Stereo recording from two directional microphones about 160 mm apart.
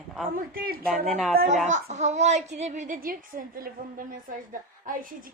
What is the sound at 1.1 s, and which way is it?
Speech, centre (ahead or behind).